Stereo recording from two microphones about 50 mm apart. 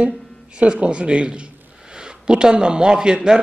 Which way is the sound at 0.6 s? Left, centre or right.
Right.